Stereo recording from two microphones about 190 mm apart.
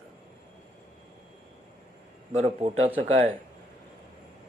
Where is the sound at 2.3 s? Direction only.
35° right (ahead or behind).